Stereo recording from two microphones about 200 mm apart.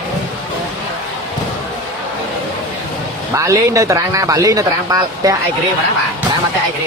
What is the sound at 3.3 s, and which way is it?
A man's voice, 15° right (ahead or behind).